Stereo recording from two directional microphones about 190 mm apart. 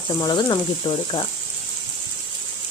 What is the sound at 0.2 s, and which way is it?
Frying, 25° left (ahead or behind).